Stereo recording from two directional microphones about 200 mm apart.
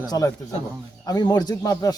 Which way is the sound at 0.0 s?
20° left (ahead or behind).